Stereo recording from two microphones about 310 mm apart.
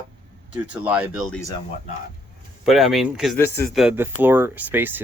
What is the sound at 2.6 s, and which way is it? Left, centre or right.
Speech, centre.